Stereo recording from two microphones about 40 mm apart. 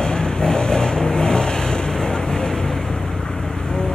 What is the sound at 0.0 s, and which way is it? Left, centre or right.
Vehicle, centre.